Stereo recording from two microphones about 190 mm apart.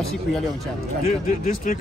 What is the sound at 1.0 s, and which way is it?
Speech, 45° left (ahead or behind).